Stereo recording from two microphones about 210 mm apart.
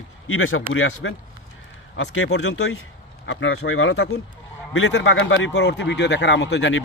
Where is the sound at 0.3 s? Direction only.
70° left (ahead or behind).